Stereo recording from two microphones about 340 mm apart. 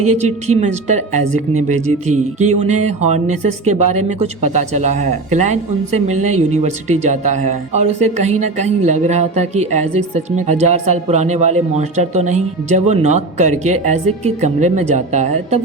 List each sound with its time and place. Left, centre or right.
0.6 s speech: right
2.4 s speech: centre